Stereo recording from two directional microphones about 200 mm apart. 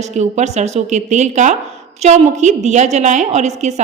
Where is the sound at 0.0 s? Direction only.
35° right (ahead or behind).